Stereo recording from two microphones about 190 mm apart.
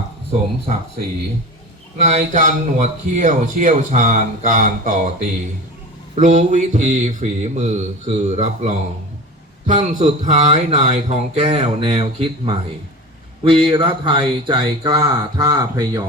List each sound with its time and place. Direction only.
2.0 s a man's voice: 40° right (ahead or behind); by 16.0 s 20° right (ahead or behind)